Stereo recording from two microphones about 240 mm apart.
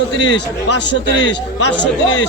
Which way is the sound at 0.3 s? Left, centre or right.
Left.